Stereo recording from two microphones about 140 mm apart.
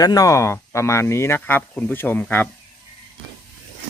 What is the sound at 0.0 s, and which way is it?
Speech, 25° left (ahead or behind).